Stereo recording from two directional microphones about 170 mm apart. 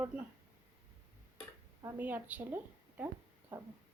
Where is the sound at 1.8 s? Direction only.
10° right (ahead or behind).